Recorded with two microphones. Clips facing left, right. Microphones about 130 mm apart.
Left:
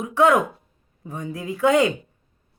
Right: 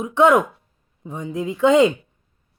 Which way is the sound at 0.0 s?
20° right (ahead or behind).